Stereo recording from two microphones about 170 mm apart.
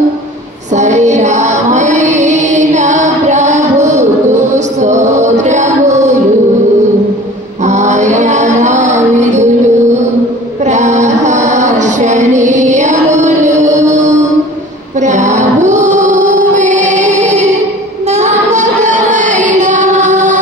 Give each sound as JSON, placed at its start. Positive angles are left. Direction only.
{"t": 0.7, "sound": "music", "side_deg": -45}
{"t": 7.6, "sound": "music", "side_deg": -45}
{"t": 15.0, "sound": "female singing", "side_deg": -45}
{"t": 18.0, "sound": "child singing", "side_deg": -40}